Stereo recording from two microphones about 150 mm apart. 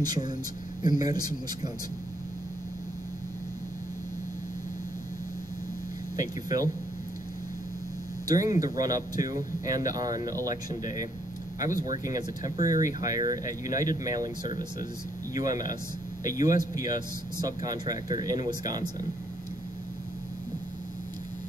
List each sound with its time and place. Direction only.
0.0 s speech: 25° right (ahead or behind)
6.1 s speech: 25° right (ahead or behind)
8.3 s speech: 25° right (ahead or behind)